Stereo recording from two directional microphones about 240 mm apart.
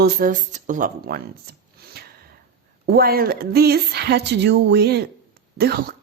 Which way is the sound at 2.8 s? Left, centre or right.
Right.